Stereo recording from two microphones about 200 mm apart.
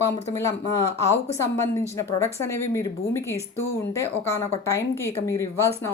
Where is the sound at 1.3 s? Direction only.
15° left (ahead or behind).